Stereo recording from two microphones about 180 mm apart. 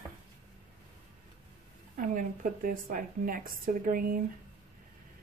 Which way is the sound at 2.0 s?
50° right (ahead or behind).